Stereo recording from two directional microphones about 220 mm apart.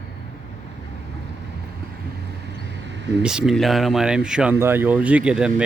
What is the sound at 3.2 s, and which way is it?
Speech, centre (ahead or behind).